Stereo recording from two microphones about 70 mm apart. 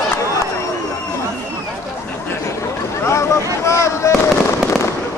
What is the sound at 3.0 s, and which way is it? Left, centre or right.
Fireworks, left.